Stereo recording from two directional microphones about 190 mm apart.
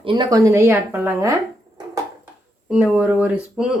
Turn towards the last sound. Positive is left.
turn(degrees=-5)  # may be behind; listen again after turning